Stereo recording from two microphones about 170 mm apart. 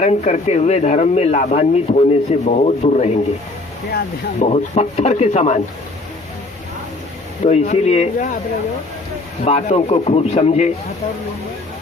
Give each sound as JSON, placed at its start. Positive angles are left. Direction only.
{"t": 0.0, "sound": "speech", "side_deg": 40}
{"t": 4.4, "sound": "speech", "side_deg": 40}
{"t": 7.4, "sound": "speech", "side_deg": 45}
{"t": 9.4, "sound": "speech", "side_deg": 45}